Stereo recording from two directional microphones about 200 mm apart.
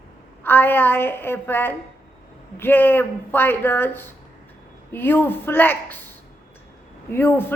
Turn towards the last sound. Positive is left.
turn(degrees=10)  # may be behind; listen again after turning